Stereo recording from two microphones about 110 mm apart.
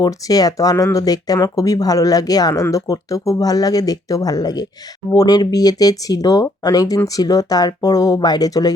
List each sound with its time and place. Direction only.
0.0 s speech: 35° left (ahead or behind)